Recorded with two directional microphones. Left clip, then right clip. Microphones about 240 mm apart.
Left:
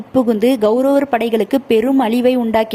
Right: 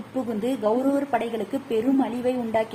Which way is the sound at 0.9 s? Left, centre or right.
Left.